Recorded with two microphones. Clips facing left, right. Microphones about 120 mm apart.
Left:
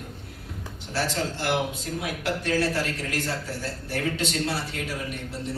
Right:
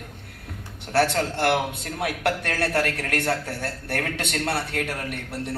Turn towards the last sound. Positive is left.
turn(degrees=-60)  # may be behind; listen again after turning